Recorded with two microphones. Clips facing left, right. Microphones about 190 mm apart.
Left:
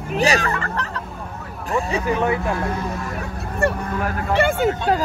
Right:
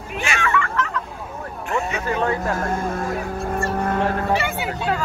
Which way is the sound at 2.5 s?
50° right (ahead or behind).